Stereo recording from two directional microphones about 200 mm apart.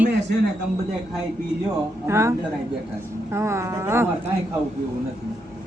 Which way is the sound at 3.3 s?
15° right (ahead or behind).